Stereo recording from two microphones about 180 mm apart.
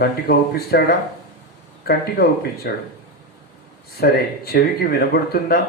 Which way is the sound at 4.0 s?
60° left (ahead or behind).